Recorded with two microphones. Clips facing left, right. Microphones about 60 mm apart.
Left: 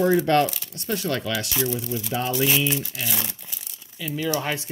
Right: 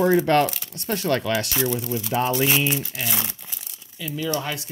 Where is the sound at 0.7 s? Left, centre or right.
Right.